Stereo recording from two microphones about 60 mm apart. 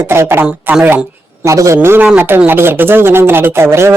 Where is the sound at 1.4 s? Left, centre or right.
Right.